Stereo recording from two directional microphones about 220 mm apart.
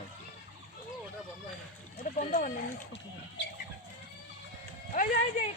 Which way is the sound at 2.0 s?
35° left (ahead or behind).